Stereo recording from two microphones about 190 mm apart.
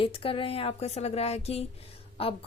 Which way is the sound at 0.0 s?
30° left (ahead or behind).